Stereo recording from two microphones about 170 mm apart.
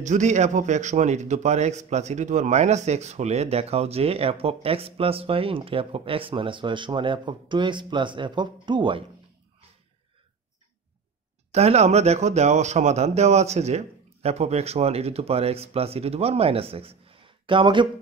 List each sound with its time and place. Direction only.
0.0 s a man's voice: 45° right (ahead or behind); by 9.0 s 30° right (ahead or behind)
11.5 s a man's voice: 40° right (ahead or behind)